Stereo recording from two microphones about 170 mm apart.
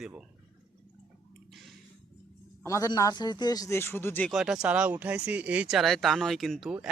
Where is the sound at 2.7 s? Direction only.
20° left (ahead or behind).